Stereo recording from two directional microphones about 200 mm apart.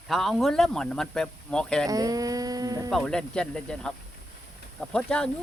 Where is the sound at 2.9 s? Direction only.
5° left (ahead or behind).